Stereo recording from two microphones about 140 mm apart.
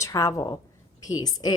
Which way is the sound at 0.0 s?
20° left (ahead or behind).